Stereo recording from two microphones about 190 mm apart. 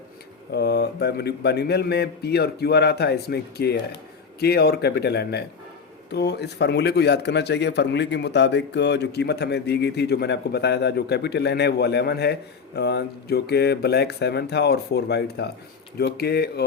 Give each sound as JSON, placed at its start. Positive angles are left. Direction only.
{"t": 0.5, "sound": "a man's voice", "side_deg": 60}